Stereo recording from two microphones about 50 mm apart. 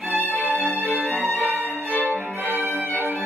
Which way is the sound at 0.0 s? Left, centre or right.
Right.